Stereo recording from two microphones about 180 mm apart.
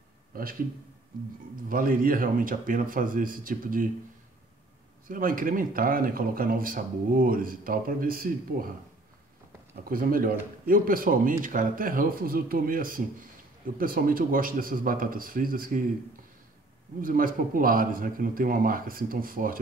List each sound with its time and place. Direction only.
0.3 s a sound: 55° right (ahead or behind)
1.7 s speech: 50° right (ahead or behind)
5.0 s speech: 50° right (ahead or behind)
9.8 s speech: 55° right (ahead or behind)
17.0 s speech: 50° right (ahead or behind)